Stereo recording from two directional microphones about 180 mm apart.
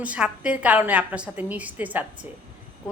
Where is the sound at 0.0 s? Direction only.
5° right (ahead or behind).